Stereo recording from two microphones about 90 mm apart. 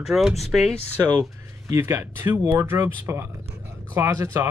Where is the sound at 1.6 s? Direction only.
30° right (ahead or behind).